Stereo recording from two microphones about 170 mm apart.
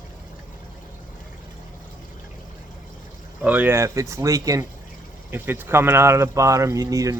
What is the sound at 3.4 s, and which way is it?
Speech, 10° right (ahead or behind).